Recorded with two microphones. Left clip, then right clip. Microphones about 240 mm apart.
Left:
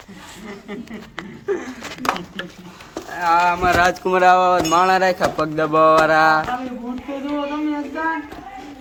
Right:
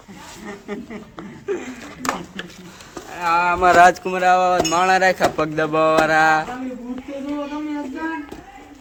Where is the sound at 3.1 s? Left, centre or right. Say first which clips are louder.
Left 2 dB; centre.